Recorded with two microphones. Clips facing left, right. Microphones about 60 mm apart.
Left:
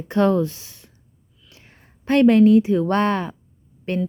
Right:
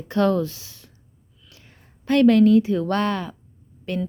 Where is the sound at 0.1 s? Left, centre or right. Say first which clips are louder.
Left 2 dB; left.